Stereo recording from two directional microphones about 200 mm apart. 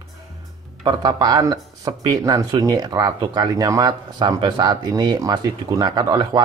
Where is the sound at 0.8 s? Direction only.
20° right (ahead or behind).